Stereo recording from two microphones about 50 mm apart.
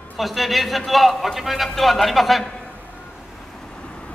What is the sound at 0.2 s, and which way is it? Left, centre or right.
A man's voice, centre.